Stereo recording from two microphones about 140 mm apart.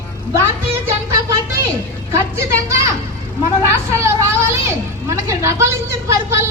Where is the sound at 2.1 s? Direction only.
20° right (ahead or behind).